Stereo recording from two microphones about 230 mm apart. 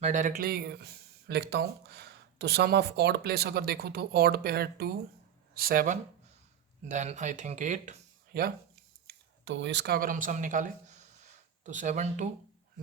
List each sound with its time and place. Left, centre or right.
0.0 s speech: right